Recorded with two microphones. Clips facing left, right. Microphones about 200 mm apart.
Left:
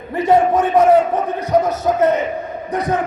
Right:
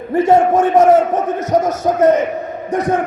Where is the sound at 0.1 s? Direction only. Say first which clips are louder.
Right 2 dB; 45° right (ahead or behind).